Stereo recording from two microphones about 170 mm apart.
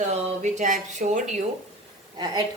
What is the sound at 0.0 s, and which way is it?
Speech, 40° right (ahead or behind).